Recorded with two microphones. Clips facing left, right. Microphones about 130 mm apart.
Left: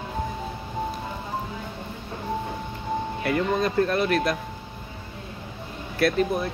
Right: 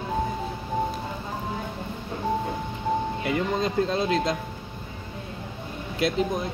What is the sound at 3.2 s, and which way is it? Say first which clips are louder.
Speech: left 2 dB; 20° right (ahead or behind).